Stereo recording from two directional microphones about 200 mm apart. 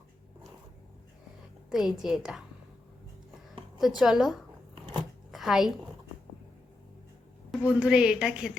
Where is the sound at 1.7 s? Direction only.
Centre (ahead or behind).